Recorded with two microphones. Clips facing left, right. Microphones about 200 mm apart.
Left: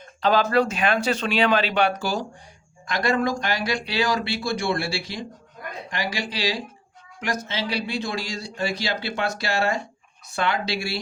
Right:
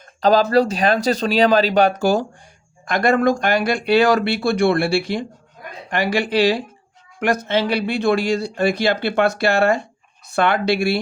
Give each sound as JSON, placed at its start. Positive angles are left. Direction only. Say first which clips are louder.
{"t": 0.0, "sound": "speech", "louder": "right 5 dB", "side_deg": -40}